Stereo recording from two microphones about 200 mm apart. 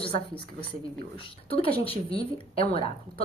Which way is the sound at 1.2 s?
25° left (ahead or behind).